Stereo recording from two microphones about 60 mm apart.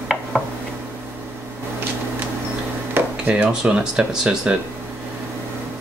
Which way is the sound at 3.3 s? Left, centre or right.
Centre.